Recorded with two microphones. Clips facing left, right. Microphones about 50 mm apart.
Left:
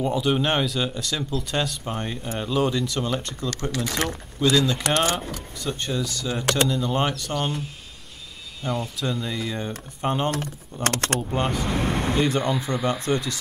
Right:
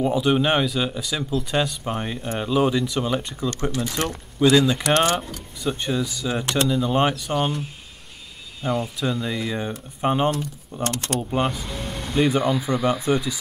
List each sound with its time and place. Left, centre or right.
0.0 s speech: centre
3.7 s speech: left
4.4 s speech: centre
4.8 s speech: right
5.6 s speech: centre
8.6 s speech: centre
10.3 s speech: left
11.5 s vehicle: left
12.2 s speech: centre